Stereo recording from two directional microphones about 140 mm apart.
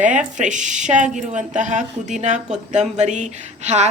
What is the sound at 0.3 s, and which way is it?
A woman's voice, 65° right (ahead or behind).